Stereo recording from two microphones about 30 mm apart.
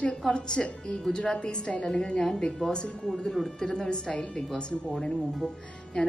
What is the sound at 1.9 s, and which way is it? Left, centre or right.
Speech, left.